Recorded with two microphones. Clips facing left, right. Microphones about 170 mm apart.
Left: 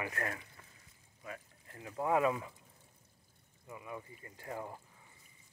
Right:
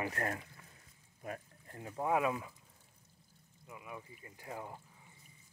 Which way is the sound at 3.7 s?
10° right (ahead or behind).